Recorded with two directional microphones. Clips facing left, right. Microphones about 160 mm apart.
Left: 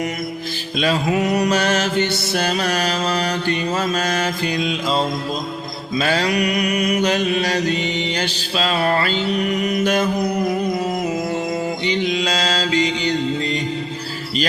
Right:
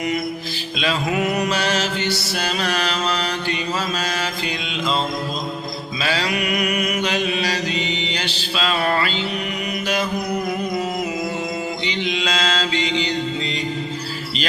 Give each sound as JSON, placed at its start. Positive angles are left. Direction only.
{"t": 1.1, "sound": "mantra", "side_deg": 35}
{"t": 11.9, "sound": "mantra", "side_deg": 45}